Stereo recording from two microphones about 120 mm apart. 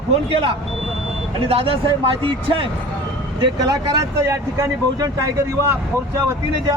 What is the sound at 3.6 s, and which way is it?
Speech, 35° right (ahead or behind).